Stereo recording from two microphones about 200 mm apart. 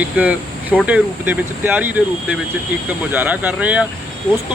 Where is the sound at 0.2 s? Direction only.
5° right (ahead or behind).